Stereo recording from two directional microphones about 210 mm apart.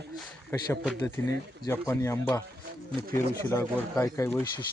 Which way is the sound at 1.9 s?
15° left (ahead or behind).